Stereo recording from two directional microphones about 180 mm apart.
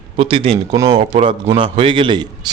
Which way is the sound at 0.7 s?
20° right (ahead or behind).